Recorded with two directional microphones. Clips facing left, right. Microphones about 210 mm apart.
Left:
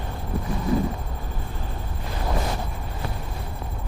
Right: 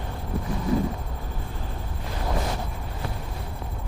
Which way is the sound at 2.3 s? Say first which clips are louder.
Left 1 dB; 25° left (ahead or behind).